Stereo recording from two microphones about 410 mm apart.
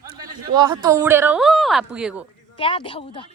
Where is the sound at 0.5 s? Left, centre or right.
Centre.